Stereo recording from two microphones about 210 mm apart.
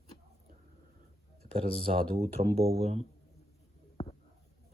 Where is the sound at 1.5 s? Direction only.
25° right (ahead or behind).